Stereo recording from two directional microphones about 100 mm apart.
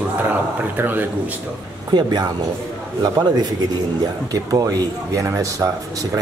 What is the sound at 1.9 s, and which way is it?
Speech, 45° right (ahead or behind).